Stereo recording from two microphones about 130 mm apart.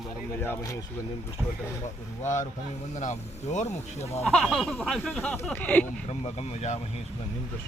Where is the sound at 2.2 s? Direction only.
70° left (ahead or behind).